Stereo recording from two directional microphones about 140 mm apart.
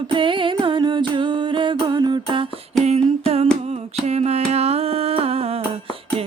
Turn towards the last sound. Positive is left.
turn(degrees=-45)  # may be behind; listen again after turning